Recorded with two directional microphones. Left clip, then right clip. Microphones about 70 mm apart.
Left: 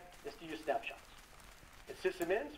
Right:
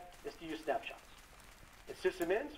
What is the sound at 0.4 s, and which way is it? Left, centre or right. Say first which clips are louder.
Speech: even; right.